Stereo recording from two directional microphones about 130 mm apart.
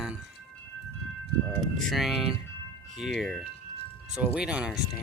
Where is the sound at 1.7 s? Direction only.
Centre (ahead or behind).